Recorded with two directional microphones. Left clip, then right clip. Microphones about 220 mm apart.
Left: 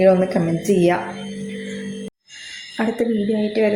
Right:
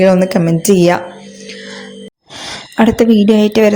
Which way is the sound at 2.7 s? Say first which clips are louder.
Right 11 dB; 45° right (ahead or behind).